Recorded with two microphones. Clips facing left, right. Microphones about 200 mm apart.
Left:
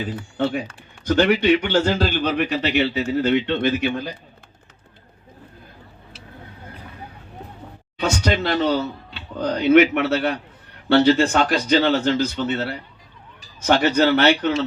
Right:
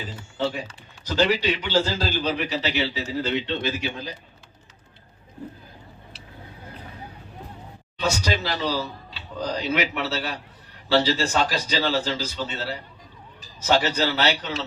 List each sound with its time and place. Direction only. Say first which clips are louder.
0.0 s speech: left 4 dB; 55° left (ahead or behind)
8.0 s speech: left 4 dB; 55° left (ahead or behind)